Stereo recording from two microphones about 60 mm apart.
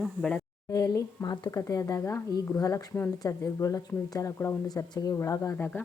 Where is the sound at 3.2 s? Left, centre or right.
Left.